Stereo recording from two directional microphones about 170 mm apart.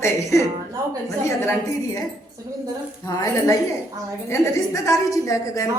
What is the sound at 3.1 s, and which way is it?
A woman's voice, 20° left (ahead or behind).